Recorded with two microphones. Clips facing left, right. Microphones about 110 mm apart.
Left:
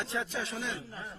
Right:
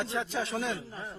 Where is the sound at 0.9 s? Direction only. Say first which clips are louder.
Right 2 dB; 30° right (ahead or behind).